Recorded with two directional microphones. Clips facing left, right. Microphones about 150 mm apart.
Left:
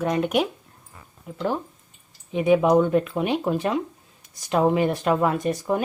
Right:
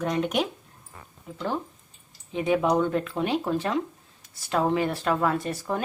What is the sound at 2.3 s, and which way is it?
Speech, 15° left (ahead or behind).